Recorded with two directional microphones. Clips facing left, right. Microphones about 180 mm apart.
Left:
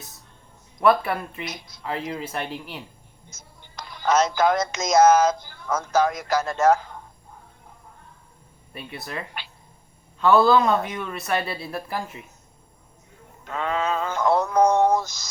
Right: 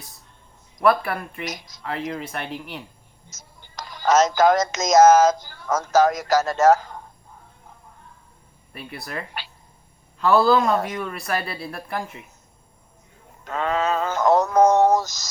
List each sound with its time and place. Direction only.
0.8 s speech: 25° left (ahead or behind)
3.2 s speech: 45° right (ahead or behind)
8.9 s speech: 20° left (ahead or behind)
10.2 s a man's voice: centre (ahead or behind)
11.3 s speech: 25° left (ahead or behind)
13.5 s synthetic singing: 45° right (ahead or behind)